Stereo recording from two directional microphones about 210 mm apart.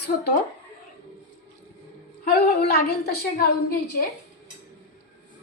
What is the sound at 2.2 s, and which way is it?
A woman's voice, 50° left (ahead or behind).